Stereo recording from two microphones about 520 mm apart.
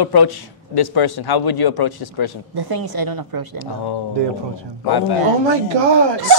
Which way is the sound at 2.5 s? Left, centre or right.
Right.